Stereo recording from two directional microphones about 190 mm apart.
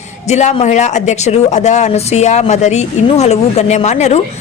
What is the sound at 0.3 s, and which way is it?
Speech, 35° left (ahead or behind).